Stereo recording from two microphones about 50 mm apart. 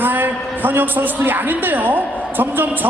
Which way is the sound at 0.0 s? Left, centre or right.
Right.